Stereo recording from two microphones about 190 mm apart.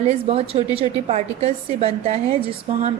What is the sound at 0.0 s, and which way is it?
A woman's voice, 35° right (ahead or behind).